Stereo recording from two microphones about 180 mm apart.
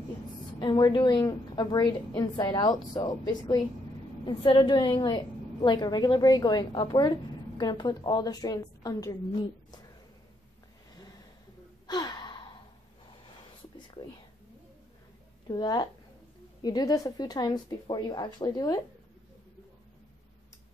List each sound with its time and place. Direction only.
0.6 s a woman's voice: 25° left (ahead or behind)
11.9 s gasp: 25° left (ahead or behind)
13.7 s whispering: 25° left (ahead or behind)
15.4 s a woman's voice: 25° left (ahead or behind)